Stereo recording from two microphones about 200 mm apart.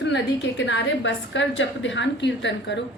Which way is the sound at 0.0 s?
65° left (ahead or behind).